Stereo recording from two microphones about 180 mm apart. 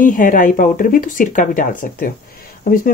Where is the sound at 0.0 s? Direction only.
50° left (ahead or behind).